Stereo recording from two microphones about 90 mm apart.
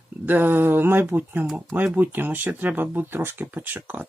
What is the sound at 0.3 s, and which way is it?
Speech, 25° right (ahead or behind).